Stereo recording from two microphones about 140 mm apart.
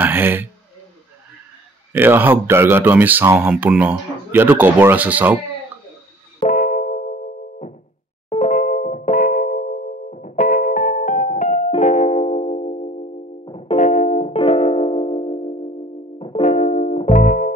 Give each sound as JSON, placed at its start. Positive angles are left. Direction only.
{"t": 0.0, "sound": "speech", "side_deg": -15}
{"t": 1.9, "sound": "speech", "side_deg": -15}
{"t": 6.4, "sound": "music", "side_deg": 75}
{"t": 13.7, "sound": "music", "side_deg": 65}
{"t": 14.3, "sound": "music", "side_deg": 45}
{"t": 16.4, "sound": "music", "side_deg": 60}
{"t": 17.1, "sound": "music", "side_deg": 75}